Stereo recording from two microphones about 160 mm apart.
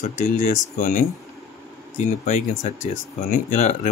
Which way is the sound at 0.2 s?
55° left (ahead or behind).